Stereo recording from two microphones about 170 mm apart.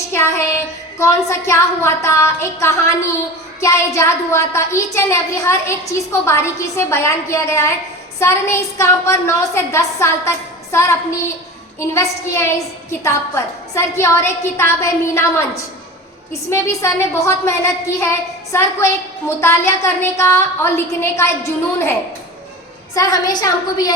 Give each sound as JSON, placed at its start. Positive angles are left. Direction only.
{"t": 0.1, "sound": "a woman's voice", "side_deg": 15}
{"t": 16.3, "sound": "a woman's voice", "side_deg": 15}
{"t": 23.0, "sound": "a woman's voice", "side_deg": 20}